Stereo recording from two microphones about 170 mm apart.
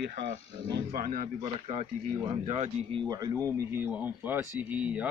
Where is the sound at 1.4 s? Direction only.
35° right (ahead or behind).